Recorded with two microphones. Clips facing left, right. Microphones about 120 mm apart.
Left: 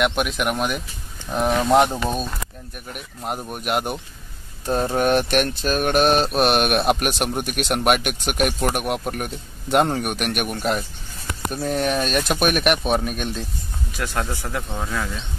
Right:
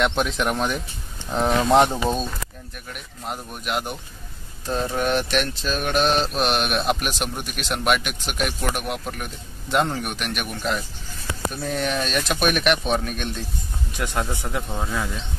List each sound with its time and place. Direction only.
0.0 s speech: 10° left (ahead or behind)
2.9 s speech: 50° left (ahead or behind)
4.9 s speech: 50° left (ahead or behind)
12.7 s speech: 10° left (ahead or behind)
14.1 s speech: 20° right (ahead or behind)
14.7 s speech: 5° right (ahead or behind)